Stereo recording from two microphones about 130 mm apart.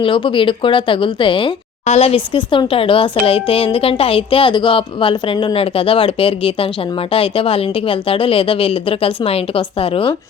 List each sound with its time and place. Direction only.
0.0 s a woman's voice: 40° left (ahead or behind)
1.9 s a woman's voice: 50° left (ahead or behind)